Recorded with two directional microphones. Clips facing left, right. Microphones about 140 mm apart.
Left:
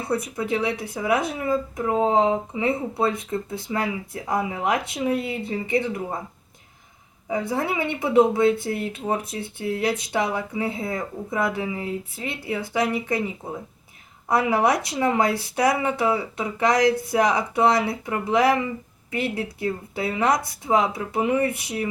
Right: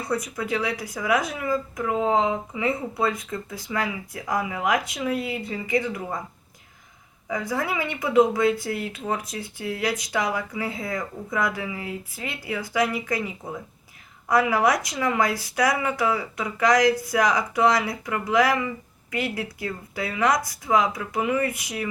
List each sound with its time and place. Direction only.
0.0 s speech: 30° left (ahead or behind)
7.3 s speech: 30° left (ahead or behind)